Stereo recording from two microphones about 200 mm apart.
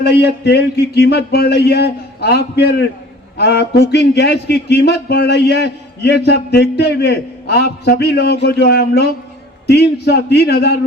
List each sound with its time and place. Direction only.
0.0 s a man's voice: 55° left (ahead or behind)